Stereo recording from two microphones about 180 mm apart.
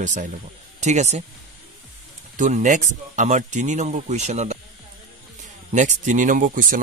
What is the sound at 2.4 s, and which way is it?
Speech, 45° right (ahead or behind).